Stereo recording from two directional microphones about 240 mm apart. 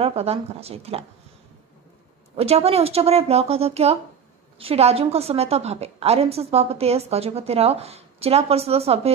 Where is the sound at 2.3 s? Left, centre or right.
Right.